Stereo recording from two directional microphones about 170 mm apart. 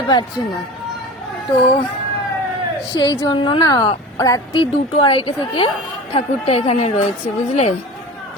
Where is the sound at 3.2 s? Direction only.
25° left (ahead or behind).